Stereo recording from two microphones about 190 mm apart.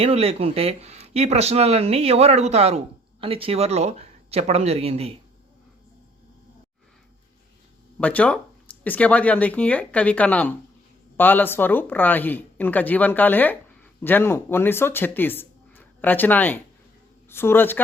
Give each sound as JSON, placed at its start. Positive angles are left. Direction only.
{"t": 0.0, "sound": "speech", "side_deg": -30}
{"t": 8.0, "sound": "speech", "side_deg": 5}